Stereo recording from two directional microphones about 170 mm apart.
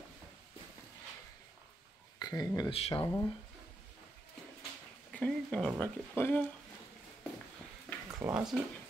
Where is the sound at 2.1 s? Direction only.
25° left (ahead or behind).